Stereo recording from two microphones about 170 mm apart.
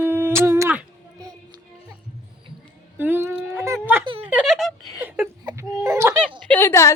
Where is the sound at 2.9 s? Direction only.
10° right (ahead or behind).